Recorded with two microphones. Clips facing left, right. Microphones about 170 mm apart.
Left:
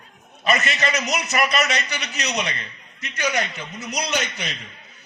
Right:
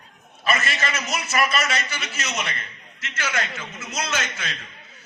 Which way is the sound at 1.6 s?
40° left (ahead or behind).